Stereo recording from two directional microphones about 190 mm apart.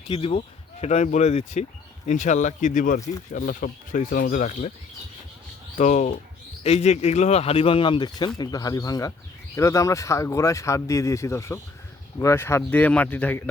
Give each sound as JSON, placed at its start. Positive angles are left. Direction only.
{"t": 0.1, "sound": "speech", "side_deg": 30}
{"t": 5.7, "sound": "speech", "side_deg": 40}